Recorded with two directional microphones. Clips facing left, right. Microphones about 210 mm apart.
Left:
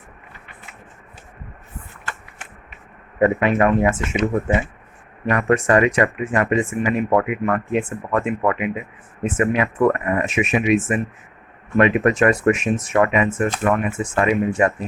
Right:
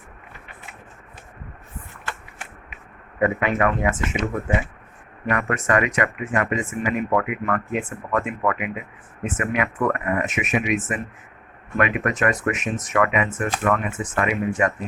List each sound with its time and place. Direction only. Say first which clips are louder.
3.2 s speech: left 4 dB; 30° left (ahead or behind)